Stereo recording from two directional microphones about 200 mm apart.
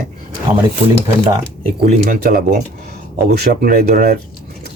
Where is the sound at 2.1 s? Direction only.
45° right (ahead or behind).